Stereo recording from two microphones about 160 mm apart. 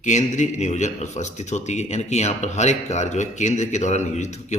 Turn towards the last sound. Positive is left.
turn(degrees=45)  # may be behind; listen again after turning